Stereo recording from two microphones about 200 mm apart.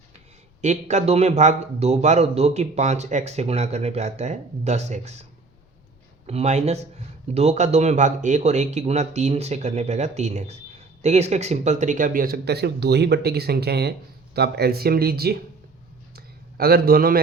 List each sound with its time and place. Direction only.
0.6 s speech: 35° right (ahead or behind)
6.2 s speech: 30° right (ahead or behind); by 15.4 s 50° right (ahead or behind)
16.1 s a sound: 50° right (ahead or behind)